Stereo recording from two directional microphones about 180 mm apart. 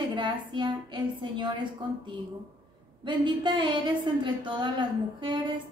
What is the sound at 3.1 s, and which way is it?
A woman's voice, 25° right (ahead or behind).